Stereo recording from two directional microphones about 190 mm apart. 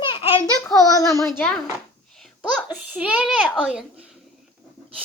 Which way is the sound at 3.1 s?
Centre (ahead or behind).